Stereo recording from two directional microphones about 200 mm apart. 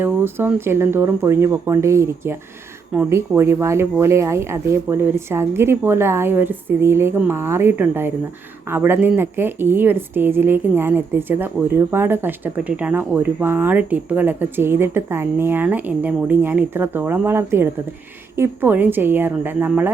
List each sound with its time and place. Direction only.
0.0 s a woman's voice: 10° right (ahead or behind)